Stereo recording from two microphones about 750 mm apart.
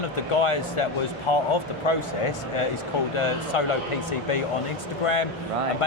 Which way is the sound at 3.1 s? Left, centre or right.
Left.